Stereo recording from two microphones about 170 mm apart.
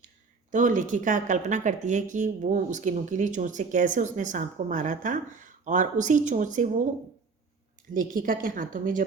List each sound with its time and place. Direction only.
0.5 s speech: 50° right (ahead or behind)
7.9 s speech: 55° right (ahead or behind)